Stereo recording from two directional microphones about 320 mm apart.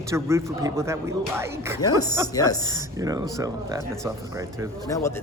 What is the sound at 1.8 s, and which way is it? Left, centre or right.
Speech, centre.